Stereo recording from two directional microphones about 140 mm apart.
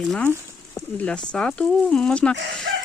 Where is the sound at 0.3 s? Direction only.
20° left (ahead or behind).